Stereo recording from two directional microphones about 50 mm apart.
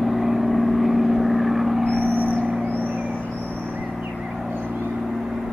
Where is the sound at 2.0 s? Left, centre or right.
Right.